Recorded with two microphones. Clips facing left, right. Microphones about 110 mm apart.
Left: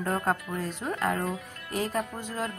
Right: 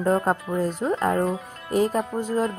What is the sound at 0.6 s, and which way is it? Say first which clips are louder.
Speech: right 7 dB; 40° right (ahead or behind).